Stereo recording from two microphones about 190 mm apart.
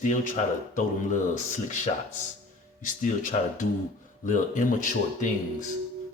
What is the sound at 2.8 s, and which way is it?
Speech, 40° left (ahead or behind).